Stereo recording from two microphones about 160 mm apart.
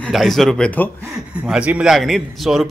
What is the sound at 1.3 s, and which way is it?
Speech, 5° right (ahead or behind).